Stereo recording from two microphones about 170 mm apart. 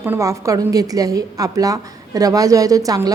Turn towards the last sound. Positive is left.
turn(degrees=-20)  # may be behind; listen again after turning